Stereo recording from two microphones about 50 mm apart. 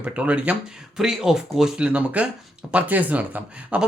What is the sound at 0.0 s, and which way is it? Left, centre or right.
Speech, right.